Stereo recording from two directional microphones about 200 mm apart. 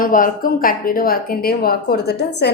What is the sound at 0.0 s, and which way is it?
A woman's voice, 45° left (ahead or behind).